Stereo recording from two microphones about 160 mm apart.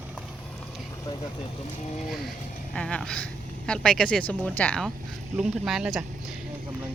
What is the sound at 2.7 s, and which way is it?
Speech, 5° left (ahead or behind).